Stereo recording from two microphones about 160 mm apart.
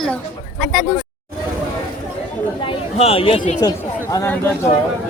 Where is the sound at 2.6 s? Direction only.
35° left (ahead or behind).